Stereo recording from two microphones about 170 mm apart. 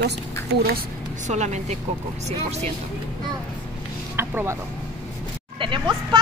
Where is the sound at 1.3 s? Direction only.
40° right (ahead or behind).